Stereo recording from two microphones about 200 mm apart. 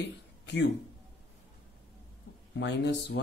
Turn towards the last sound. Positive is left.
turn(degrees=60)  # may be behind; listen again after turning